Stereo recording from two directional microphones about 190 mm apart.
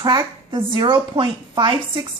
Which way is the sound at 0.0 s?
20° right (ahead or behind).